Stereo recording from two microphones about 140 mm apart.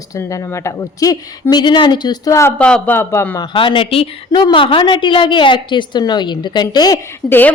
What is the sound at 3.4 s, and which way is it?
A woman's voice, 35° left (ahead or behind).